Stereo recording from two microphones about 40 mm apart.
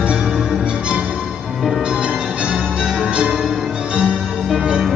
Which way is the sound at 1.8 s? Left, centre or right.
Right.